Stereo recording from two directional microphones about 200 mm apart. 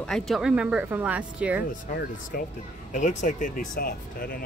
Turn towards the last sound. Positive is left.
turn(degrees=45)  # may be behind; listen again after turning